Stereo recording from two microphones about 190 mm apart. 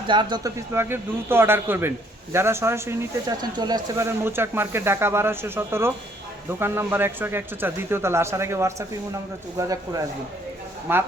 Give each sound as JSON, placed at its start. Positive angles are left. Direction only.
{"t": 0.1, "sound": "speech", "side_deg": -25}